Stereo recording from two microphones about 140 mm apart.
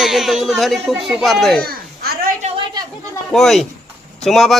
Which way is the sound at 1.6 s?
90° right.